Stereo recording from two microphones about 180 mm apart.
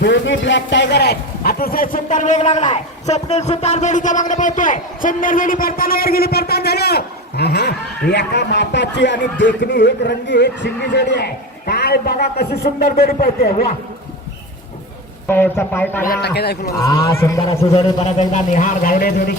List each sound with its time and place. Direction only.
0.0 s a man's voice: 85° left; by 13.5 s 60° left (ahead or behind)
15.3 s a man's voice: 10° left (ahead or behind)
16.0 s a man's voice: 65° left (ahead or behind)
16.7 s a man's voice: 20° left (ahead or behind)
17.7 s a man's voice: 35° left (ahead or behind); by 19.4 s 55° left (ahead or behind)